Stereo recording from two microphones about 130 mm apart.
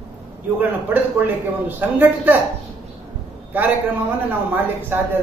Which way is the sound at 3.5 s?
15° right (ahead or behind).